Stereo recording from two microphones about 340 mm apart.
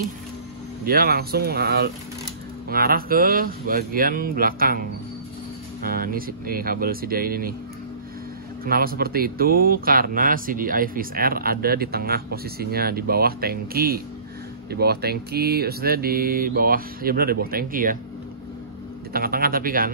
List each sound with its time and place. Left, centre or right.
0.8 s speech: right
5.9 s speech: right
8.6 s speech: right
19.1 s a sound: right